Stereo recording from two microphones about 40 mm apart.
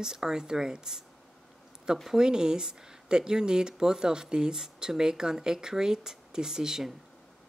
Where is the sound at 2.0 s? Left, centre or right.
Centre.